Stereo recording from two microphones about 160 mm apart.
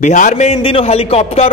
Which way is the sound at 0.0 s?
50° left (ahead or behind).